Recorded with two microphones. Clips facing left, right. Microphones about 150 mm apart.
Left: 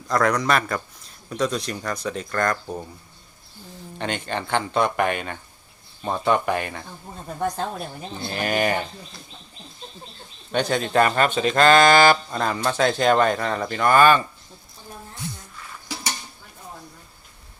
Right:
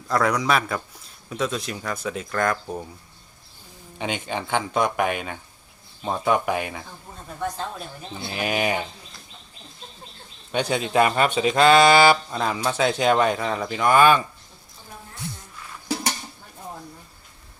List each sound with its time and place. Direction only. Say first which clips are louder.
0.1 s a man's voice: left 1 dB; 5° right (ahead or behind)
3.9 s a man's voice: even; 10° right (ahead or behind)
7.4 s speech: left 3 dB; 50° left (ahead or behind)
8.2 s a man's voice: left 2 dB; 5° right (ahead or behind)
10.5 s speech: left 1 dB; 5° right (ahead or behind)